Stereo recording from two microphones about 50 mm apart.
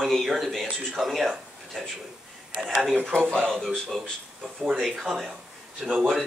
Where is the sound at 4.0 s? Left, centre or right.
Centre.